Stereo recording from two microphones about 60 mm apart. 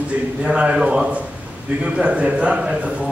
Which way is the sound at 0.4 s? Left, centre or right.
Centre.